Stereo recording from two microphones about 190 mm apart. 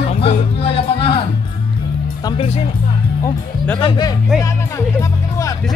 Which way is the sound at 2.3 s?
30° left (ahead or behind).